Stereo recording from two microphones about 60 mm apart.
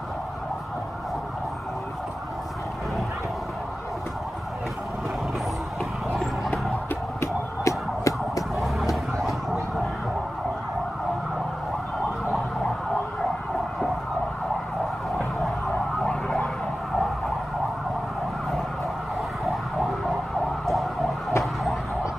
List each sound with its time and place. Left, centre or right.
7.2 s emergency vehicle: left
8.5 s vehicle: centre
16.0 s vehicle: centre
19.4 s vehicle: centre
20.6 s emergency vehicle: centre